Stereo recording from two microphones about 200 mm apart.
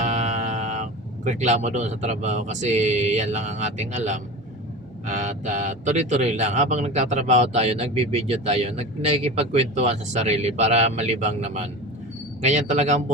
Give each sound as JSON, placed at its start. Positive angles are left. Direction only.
{"t": 0.0, "sound": "speech", "side_deg": -35}